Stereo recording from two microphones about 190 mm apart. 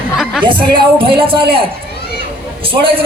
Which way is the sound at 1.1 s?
30° right (ahead or behind).